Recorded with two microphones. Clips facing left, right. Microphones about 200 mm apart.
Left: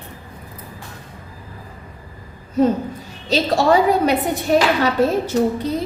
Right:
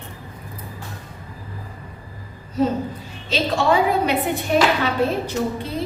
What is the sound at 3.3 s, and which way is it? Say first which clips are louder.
A woman's voice: left 3 dB; 40° left (ahead or behind).